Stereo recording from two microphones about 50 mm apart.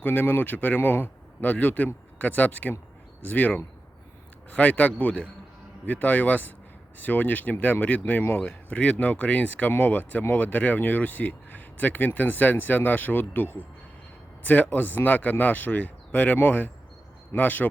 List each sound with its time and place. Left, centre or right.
0.0 s speech: left
4.5 s speech: left